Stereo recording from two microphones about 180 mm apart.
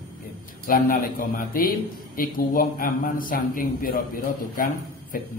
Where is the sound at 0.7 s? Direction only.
50° left (ahead or behind).